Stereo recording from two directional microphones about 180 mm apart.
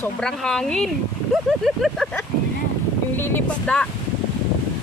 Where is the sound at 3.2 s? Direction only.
10° left (ahead or behind).